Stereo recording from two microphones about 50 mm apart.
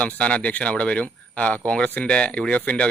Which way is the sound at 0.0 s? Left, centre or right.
Left.